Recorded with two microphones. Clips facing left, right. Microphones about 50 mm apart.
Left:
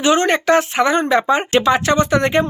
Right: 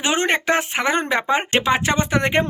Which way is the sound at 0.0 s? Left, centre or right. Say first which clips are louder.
Left 5 dB; right.